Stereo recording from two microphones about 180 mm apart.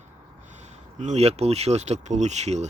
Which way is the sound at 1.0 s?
40° right (ahead or behind).